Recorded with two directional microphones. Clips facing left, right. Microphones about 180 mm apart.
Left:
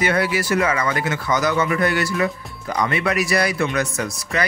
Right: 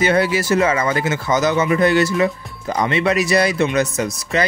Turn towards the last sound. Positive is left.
turn(degrees=-20)  # may be behind; listen again after turning